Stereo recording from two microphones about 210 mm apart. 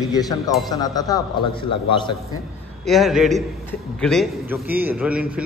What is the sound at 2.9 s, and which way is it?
A man's voice, centre (ahead or behind).